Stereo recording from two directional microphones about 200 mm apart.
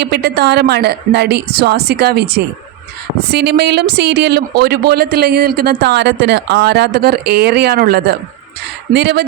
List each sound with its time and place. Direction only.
0.0 s speech: 55° right (ahead or behind)